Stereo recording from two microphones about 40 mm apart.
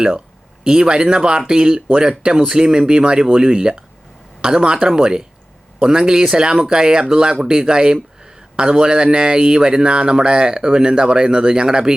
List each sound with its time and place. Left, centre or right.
0.6 s speech: centre